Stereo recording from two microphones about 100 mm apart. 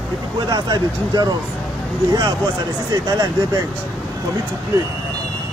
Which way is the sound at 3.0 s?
40° right (ahead or behind).